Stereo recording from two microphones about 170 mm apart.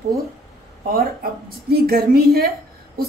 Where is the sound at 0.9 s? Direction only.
65° right (ahead or behind).